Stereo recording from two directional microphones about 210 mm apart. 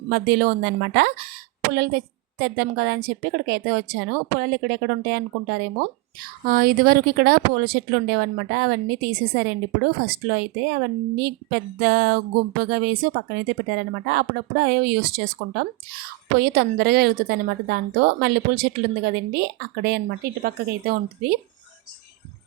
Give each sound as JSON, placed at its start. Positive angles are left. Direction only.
{"t": 0.1, "sound": "a woman's voice", "side_deg": -45}